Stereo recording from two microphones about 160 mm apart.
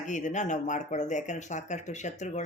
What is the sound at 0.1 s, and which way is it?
Speech, 50° left (ahead or behind).